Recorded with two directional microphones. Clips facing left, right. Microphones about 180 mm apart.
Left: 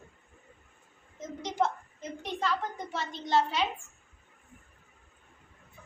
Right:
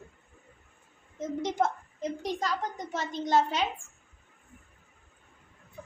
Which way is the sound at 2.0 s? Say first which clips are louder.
Right 2 dB; 35° right (ahead or behind).